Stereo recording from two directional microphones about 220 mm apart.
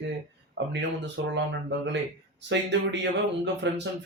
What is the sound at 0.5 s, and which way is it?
Speech, 55° right (ahead or behind).